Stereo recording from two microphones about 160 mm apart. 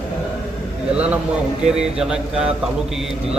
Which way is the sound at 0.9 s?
10° right (ahead or behind).